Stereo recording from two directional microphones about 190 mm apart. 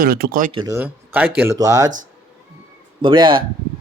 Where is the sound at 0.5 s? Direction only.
20° right (ahead or behind).